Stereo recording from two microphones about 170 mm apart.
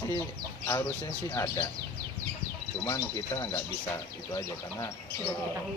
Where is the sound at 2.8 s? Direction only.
20° left (ahead or behind).